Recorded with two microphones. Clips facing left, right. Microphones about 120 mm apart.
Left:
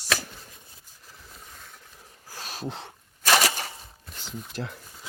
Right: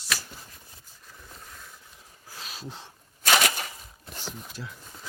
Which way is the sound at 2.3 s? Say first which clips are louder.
Left 3 dB; 40° left (ahead or behind).